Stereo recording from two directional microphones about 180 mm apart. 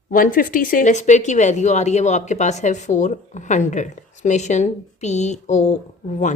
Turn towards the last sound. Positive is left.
turn(degrees=40)  # may be behind; listen again after turning